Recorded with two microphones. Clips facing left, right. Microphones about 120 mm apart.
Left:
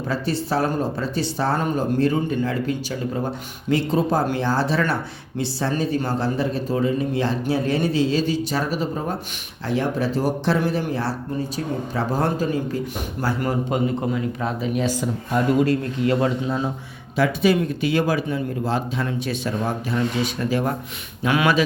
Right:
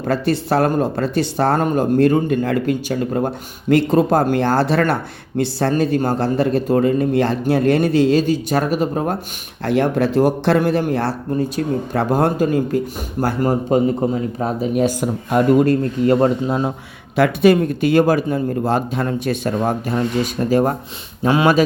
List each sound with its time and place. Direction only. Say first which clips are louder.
0.0 s speech: right 6 dB; 60° right (ahead or behind)
13.2 s speech: right 5 dB; 40° right (ahead or behind)
16.5 s speech: right 4 dB; 55° right (ahead or behind); by 21.6 s 35° right (ahead or behind)